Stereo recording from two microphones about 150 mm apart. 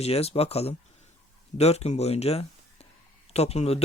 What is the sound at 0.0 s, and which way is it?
Speech, 45° left (ahead or behind).